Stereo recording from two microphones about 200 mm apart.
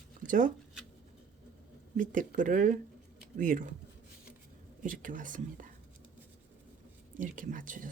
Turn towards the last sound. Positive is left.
turn(degrees=-40)  # may be behind; listen again after turning